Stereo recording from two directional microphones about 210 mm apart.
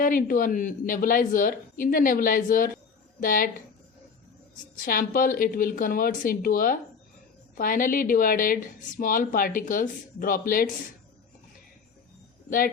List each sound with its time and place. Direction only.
0.0 s a woman's voice: 40° left (ahead or behind)
4.9 s a woman's voice: 45° left (ahead or behind)
12.5 s speech: 40° left (ahead or behind)